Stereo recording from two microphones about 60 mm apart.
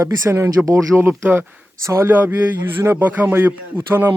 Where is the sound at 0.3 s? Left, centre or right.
Right.